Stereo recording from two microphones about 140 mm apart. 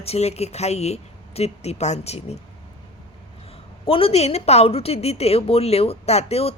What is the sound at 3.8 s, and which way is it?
A woman's voice, 40° left (ahead or behind).